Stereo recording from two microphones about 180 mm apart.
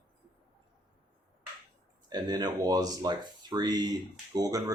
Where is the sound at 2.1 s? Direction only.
20° right (ahead or behind).